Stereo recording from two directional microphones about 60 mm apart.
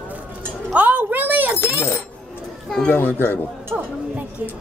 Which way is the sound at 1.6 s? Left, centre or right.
Left.